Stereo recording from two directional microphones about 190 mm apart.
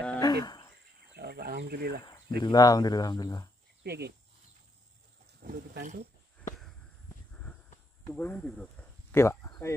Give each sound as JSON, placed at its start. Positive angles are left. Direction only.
{"t": 0.2, "sound": "cricket", "side_deg": 20}
{"t": 1.1, "sound": "wild animals", "side_deg": -55}
{"t": 2.0, "sound": "cricket", "side_deg": 20}
{"t": 2.4, "sound": "speech", "side_deg": 20}
{"t": 3.8, "sound": "speech", "side_deg": -60}
{"t": 5.2, "sound": "speech", "side_deg": -50}
{"t": 8.1, "sound": "speech", "side_deg": 10}